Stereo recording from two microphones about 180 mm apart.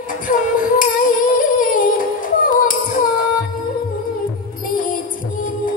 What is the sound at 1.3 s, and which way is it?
Singing, 50° left (ahead or behind).